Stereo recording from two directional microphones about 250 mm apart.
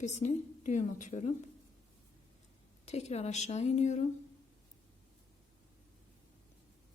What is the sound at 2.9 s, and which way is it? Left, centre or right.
A woman's voice, left.